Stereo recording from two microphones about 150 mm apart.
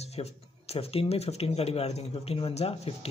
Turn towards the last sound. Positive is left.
turn(degrees=40)  # may be behind; listen again after turning